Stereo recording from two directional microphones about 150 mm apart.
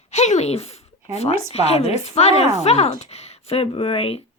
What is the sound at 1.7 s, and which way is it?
A woman's voice, 45° left (ahead or behind).